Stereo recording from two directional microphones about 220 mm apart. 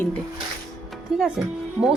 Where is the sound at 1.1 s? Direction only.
5° right (ahead or behind).